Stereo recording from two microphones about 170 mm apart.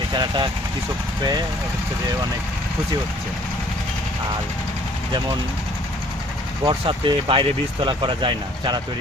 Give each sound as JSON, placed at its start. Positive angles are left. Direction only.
{"t": 0.1, "sound": "speech", "side_deg": -25}
{"t": 6.7, "sound": "speech", "side_deg": -30}